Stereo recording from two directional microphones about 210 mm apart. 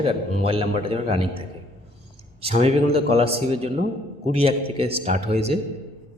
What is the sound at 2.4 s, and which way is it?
A man's voice, 30° right (ahead or behind).